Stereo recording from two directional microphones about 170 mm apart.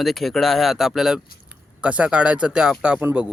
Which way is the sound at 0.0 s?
Centre (ahead or behind).